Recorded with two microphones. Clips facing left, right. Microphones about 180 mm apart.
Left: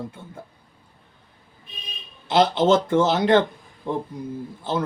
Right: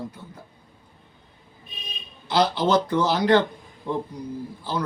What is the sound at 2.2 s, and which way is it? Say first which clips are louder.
Speech: left 4 dB; 25° left (ahead or behind).